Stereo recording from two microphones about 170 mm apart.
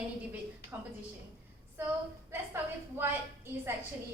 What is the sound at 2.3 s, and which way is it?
A woman's voice, 15° right (ahead or behind).